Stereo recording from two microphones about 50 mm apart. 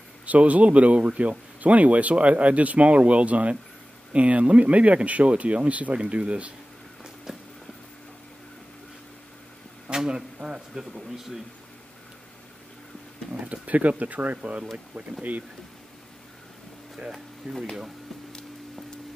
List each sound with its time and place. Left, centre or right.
0.3 s speech: right
7.3 s a sound: centre
9.8 s speech: centre
10.8 s speech: centre
13.3 s speech: right
17.4 s speech: right